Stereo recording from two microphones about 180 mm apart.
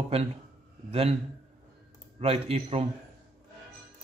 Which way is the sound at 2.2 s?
35° right (ahead or behind).